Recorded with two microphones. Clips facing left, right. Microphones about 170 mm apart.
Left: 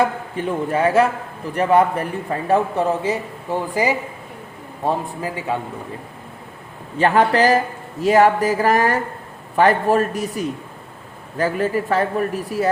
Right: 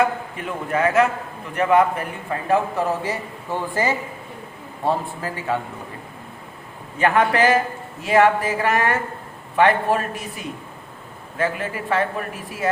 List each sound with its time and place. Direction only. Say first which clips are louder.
0.3 s a man's voice: left 5 dB; 30° left (ahead or behind); by 5.5 s 15° left (ahead or behind)
7.0 s speech: left 2 dB; 35° left (ahead or behind)